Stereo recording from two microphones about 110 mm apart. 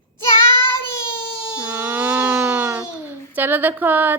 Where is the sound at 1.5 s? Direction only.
10° right (ahead or behind).